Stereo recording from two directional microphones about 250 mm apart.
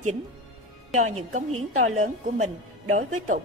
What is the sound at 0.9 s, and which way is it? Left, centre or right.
A woman's voice, right.